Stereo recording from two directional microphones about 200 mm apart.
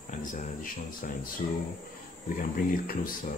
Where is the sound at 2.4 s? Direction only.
45° left (ahead or behind).